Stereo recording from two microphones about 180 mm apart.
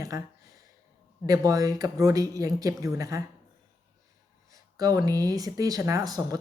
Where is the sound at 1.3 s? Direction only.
20° right (ahead or behind).